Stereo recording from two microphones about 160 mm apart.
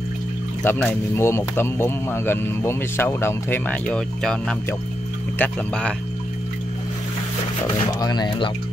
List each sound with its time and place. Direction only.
0.7 s speech: 15° left (ahead or behind)
8.0 s speech: 25° left (ahead or behind)